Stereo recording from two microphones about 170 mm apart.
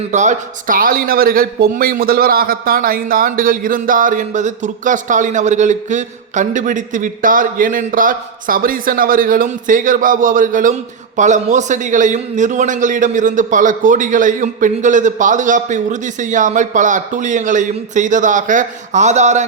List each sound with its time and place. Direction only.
0.1 s a man's voice: 45° right (ahead or behind)